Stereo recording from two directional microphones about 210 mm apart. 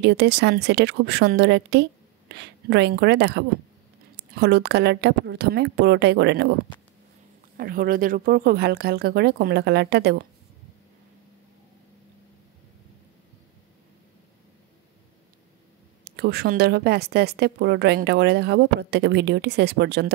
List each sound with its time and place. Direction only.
0.0 s speech: 55° right (ahead or behind)
7.5 s speech: 45° right (ahead or behind)
16.0 s speech: 50° right (ahead or behind)